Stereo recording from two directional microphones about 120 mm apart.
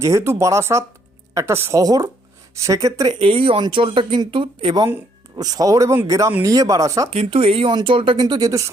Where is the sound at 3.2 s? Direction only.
50° right (ahead or behind); by 7.1 s 25° right (ahead or behind).